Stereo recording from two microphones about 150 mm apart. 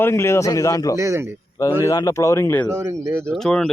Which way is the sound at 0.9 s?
20° right (ahead or behind).